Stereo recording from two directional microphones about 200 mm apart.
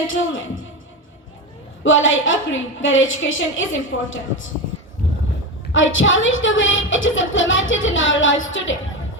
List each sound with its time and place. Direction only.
0.1 s speech: 75° left (ahead or behind)
1.8 s speech: 75° left (ahead or behind)
5.7 s speech: 75° left (ahead or behind)